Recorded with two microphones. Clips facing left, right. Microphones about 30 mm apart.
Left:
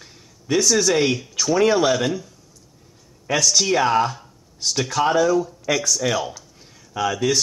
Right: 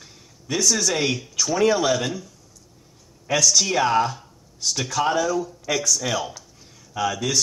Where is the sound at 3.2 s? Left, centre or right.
Centre.